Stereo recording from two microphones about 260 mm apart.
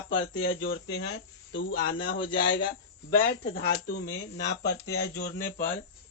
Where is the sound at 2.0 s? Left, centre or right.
Left.